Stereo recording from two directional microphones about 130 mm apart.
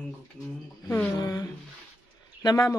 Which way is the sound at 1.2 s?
30° left (ahead or behind).